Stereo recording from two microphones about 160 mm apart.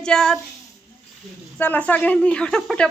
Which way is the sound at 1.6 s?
10° left (ahead or behind).